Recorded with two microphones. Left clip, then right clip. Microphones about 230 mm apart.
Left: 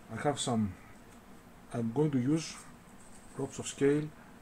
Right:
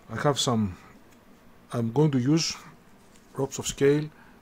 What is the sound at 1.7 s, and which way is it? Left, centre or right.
Speech, right.